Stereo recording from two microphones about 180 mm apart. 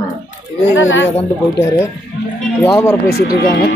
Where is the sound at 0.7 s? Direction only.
90° left.